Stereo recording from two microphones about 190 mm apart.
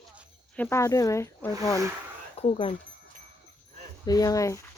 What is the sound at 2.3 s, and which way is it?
Speech, 35° left (ahead or behind).